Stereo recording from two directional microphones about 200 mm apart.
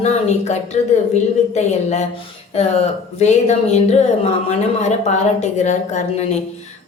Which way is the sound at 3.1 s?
35° left (ahead or behind).